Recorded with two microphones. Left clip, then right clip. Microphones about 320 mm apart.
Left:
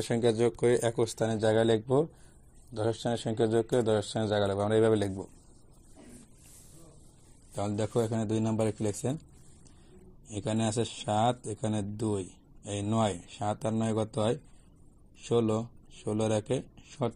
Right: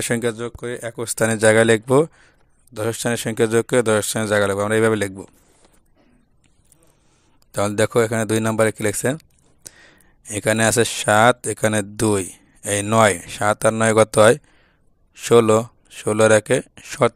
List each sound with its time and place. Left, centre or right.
0.2 s speech: centre
1.1 s speech: right
7.5 s speech: right
10.5 s speech: right